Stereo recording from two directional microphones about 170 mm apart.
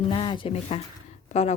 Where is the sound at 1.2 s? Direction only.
40° left (ahead or behind).